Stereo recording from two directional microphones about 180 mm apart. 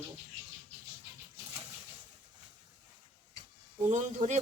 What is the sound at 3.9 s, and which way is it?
Speech, 40° right (ahead or behind).